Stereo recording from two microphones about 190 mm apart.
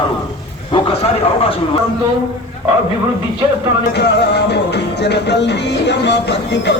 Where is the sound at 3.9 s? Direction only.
60° left (ahead or behind).